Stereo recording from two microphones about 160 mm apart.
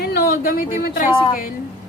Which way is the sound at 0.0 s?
75° left (ahead or behind).